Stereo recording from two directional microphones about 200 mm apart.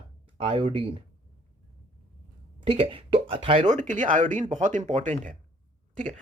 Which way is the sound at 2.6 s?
25° right (ahead or behind).